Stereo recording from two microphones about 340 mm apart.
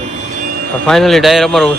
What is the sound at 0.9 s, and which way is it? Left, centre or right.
Speech, centre.